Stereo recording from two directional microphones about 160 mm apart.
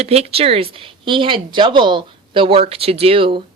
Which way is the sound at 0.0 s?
40° right (ahead or behind).